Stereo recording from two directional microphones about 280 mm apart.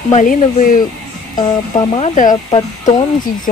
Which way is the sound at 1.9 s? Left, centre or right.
Left.